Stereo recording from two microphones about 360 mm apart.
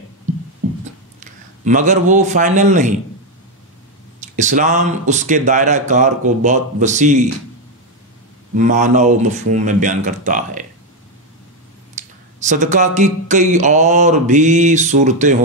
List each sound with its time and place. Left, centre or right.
1.6 s speech: right
4.2 s speech: centre
8.5 s speech: centre
12.0 s a sound: centre
12.4 s speech: centre